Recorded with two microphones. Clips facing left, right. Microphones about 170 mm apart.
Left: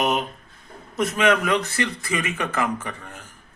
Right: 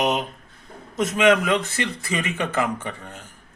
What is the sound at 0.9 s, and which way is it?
A man's voice, 20° right (ahead or behind).